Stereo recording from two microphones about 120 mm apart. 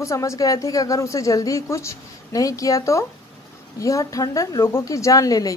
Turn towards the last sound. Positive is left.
turn(degrees=30)  # may be behind; listen again after turning